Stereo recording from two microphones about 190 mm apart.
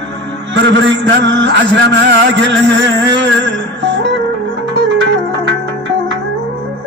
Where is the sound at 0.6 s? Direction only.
70° right (ahead or behind).